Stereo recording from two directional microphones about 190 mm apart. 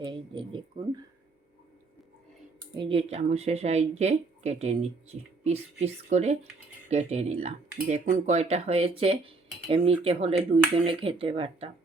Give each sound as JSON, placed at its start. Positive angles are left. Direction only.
{"t": 0.0, "sound": "speech", "side_deg": -25}
{"t": 2.7, "sound": "speech", "side_deg": -25}